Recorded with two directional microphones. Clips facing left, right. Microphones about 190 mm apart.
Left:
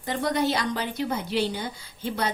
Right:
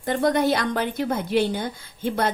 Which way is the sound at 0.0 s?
50° right (ahead or behind).